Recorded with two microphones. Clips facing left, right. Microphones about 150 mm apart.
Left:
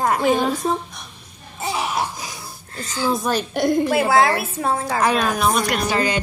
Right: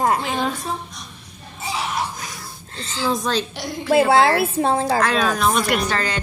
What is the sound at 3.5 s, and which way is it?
Speech, 55° left (ahead or behind).